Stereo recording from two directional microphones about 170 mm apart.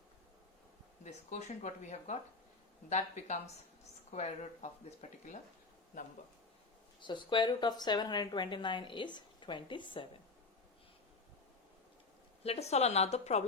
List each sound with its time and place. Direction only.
1.0 s speech: 45° left (ahead or behind)
7.0 s speech: 25° left (ahead or behind)
12.4 s a woman's voice: 40° left (ahead or behind)